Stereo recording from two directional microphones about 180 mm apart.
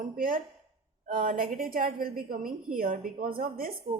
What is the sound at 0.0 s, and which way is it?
A woman's voice, 50° right (ahead or behind).